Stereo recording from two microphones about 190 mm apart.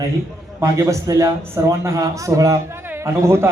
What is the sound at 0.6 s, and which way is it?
A man's voice, 15° right (ahead or behind).